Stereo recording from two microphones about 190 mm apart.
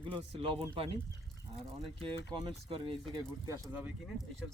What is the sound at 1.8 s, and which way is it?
Speech, centre (ahead or behind).